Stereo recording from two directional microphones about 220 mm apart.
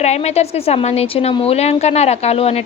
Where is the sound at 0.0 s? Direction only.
30° left (ahead or behind).